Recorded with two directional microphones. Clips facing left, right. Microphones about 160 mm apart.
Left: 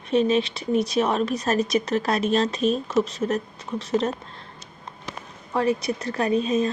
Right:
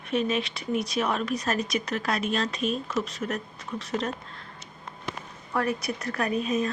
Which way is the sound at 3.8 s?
25° left (ahead or behind).